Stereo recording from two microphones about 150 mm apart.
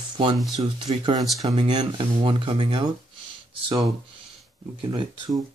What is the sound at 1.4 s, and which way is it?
Speech, 45° right (ahead or behind).